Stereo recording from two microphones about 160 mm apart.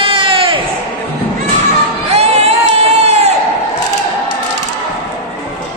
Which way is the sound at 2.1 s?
40° right (ahead or behind).